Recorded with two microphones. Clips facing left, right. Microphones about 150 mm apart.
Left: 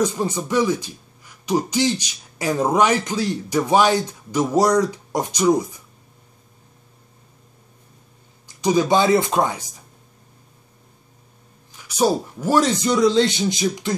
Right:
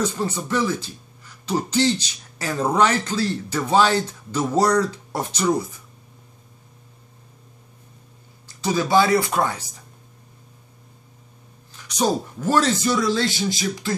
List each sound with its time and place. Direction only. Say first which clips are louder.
0.0 s speech: left 3 dB; 15° left (ahead or behind)
8.5 s speech: left 4 dB; 15° left (ahead or behind)
11.7 s speech: left 3 dB; 10° left (ahead or behind)